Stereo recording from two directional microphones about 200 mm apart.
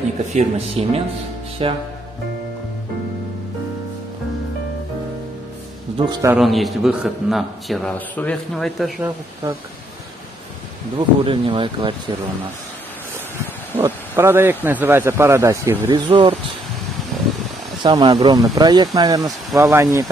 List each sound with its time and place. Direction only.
0.3 s speech: 30° right (ahead or behind)
5.9 s speech: 20° right (ahead or behind)
6.3 s a man's voice: centre (ahead or behind)
11.0 s speech: 25° right (ahead or behind)
13.7 s speech: 10° right (ahead or behind)
15.9 s speech: 25° right (ahead or behind)
17.8 s speech: 20° right (ahead or behind)